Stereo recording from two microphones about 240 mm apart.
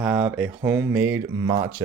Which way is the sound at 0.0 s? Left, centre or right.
Centre.